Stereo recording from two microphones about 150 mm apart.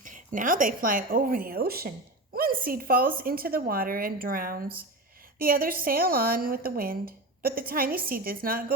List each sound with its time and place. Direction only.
0.0 s a woman's voice: 60° right (ahead or behind); by 1.9 s 90° right
2.3 s a woman's voice: 75° right (ahead or behind)